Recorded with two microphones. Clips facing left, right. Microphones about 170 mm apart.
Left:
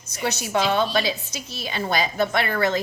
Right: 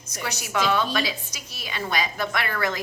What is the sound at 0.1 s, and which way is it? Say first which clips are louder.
A woman's voice: left 5 dB; 30° left (ahead or behind).